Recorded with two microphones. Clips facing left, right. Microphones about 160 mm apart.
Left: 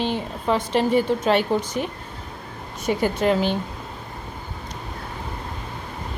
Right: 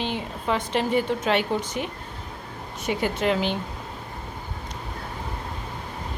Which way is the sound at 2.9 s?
40° left (ahead or behind).